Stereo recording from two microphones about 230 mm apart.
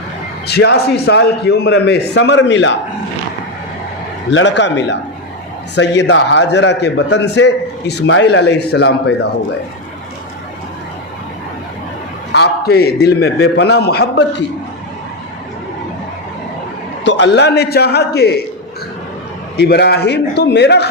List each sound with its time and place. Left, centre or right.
0.4 s a man's voice: left
4.3 s a man's voice: left
12.3 s a man's voice: left
17.0 s a man's voice: left
19.5 s a man's voice: left